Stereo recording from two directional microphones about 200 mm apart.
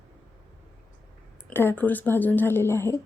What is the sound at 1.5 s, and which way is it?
A woman's voice, 10° left (ahead or behind).